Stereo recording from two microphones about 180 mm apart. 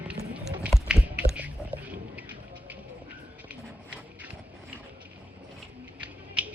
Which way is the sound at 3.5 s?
5° right (ahead or behind).